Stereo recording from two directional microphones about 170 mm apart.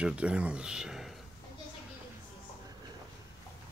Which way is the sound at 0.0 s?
5° right (ahead or behind).